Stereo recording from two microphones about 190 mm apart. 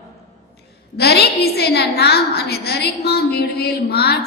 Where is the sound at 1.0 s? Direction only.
60° left (ahead or behind).